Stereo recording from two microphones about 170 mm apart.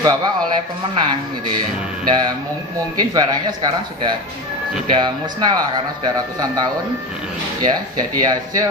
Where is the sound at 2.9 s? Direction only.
25° right (ahead or behind).